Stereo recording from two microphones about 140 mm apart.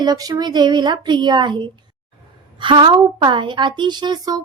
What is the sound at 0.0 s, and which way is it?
A woman's voice, 30° right (ahead or behind).